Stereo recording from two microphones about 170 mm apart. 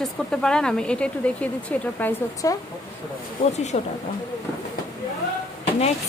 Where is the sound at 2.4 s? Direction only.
20° left (ahead or behind).